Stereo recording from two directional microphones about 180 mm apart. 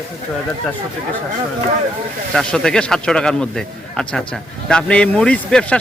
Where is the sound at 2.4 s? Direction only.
5° left (ahead or behind).